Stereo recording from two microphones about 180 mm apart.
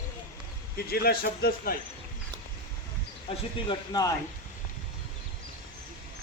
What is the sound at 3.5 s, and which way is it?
Speech, 25° left (ahead or behind).